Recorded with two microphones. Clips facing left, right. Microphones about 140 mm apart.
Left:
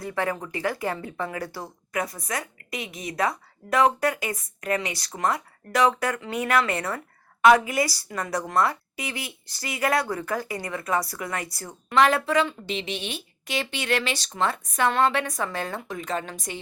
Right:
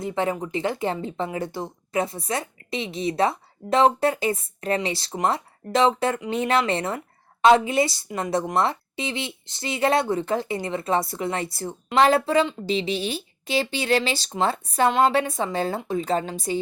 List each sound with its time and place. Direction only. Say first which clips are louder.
0.0 s a woman's voice: right 3 dB; 20° right (ahead or behind)